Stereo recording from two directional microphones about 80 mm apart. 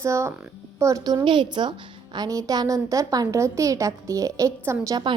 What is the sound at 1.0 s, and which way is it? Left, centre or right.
Speech, right.